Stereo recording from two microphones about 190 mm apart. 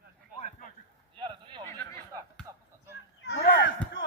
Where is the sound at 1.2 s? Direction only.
25° right (ahead or behind).